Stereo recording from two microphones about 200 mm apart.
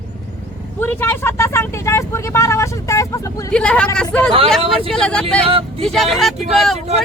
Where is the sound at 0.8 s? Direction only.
10° left (ahead or behind).